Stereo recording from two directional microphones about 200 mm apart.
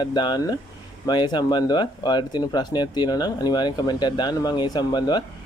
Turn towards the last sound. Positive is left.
turn(degrees=20)  # may be behind; listen again after turning